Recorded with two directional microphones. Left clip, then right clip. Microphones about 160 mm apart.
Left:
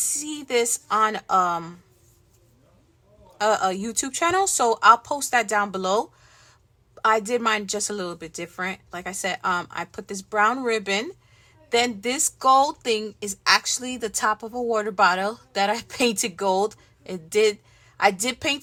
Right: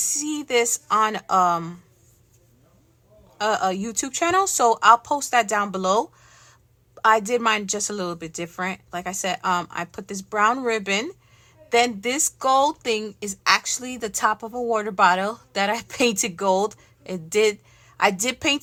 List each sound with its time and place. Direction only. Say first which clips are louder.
0.0 s speech: right 3 dB; 20° right (ahead or behind)
3.3 s speech: left 1 dB; 15° right (ahead or behind)